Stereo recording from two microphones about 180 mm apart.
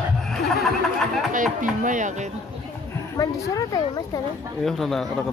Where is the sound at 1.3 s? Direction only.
45° right (ahead or behind).